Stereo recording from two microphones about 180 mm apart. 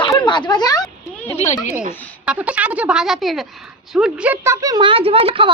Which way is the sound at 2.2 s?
5° right (ahead or behind).